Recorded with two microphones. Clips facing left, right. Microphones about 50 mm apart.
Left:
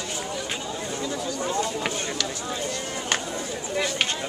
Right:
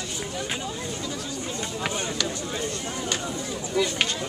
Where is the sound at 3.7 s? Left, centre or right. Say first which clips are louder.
Right 2 dB; left.